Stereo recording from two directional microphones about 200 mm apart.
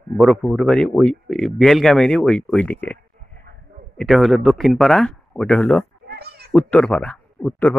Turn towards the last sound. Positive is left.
turn(degrees=10)  # may be behind; listen again after turning